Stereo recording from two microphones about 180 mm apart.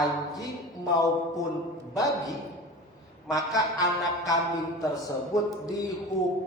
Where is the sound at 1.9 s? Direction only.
20° left (ahead or behind).